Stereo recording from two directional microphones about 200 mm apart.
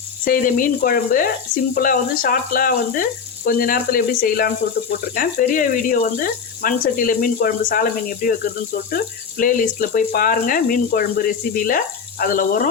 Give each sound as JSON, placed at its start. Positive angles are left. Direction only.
{"t": 0.3, "sound": "speech", "side_deg": 45}
{"t": 9.4, "sound": "speech", "side_deg": 45}